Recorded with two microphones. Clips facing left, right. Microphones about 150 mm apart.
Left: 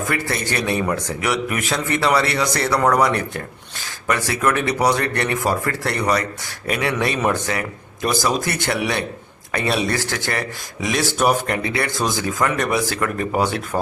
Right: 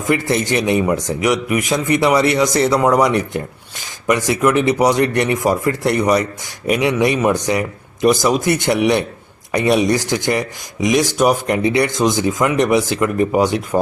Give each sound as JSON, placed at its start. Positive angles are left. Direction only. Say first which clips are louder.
{"t": 0.1, "sound": "a man's voice", "louder": "right 10 dB", "side_deg": -20}